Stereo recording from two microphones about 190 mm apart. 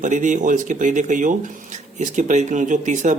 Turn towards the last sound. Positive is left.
turn(degrees=-40)  # may be behind; listen again after turning